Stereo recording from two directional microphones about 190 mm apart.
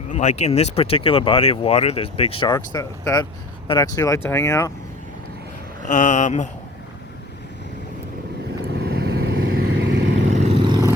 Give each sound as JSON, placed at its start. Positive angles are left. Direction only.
{"t": 0.1, "sound": "speech", "side_deg": 40}
{"t": 5.9, "sound": "speech", "side_deg": 40}
{"t": 8.7, "sound": "vehicle", "side_deg": -55}
{"t": 10.3, "sound": "vehicle", "side_deg": -35}
{"t": 10.7, "sound": "vehicle", "side_deg": -20}